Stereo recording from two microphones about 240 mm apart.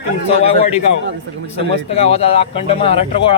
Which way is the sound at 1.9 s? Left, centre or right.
Left.